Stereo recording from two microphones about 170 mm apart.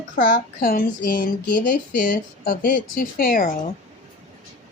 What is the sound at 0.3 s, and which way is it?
Speech, 55° left (ahead or behind).